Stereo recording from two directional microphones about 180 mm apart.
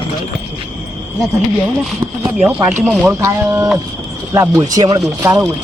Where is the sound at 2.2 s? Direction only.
10° right (ahead or behind).